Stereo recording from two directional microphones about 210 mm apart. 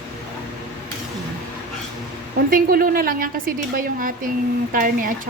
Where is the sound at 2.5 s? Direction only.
45° right (ahead or behind).